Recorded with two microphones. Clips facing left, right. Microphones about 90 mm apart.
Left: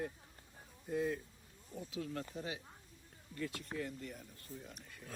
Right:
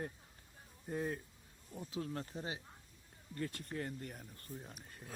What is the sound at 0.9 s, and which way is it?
Speech, 40° right (ahead or behind).